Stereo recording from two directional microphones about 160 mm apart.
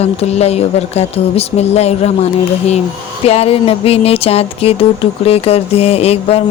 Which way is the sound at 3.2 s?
40° left (ahead or behind).